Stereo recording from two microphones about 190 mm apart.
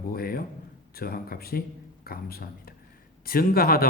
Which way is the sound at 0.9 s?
55° left (ahead or behind).